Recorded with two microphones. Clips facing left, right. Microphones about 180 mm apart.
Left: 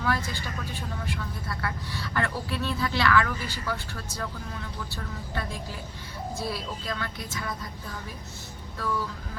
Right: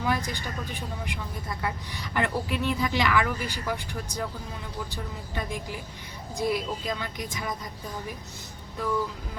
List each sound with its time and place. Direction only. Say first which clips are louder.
0.0 s speech: right 1 dB; 15° right (ahead or behind)